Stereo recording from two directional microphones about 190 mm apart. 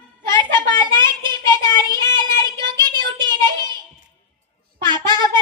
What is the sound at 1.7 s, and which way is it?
Child singing, 25° right (ahead or behind).